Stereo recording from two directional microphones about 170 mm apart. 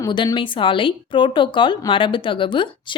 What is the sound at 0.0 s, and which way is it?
A woman's voice, 25° left (ahead or behind).